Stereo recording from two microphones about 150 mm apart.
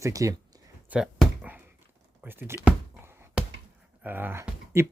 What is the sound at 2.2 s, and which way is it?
Speech, 15° right (ahead or behind).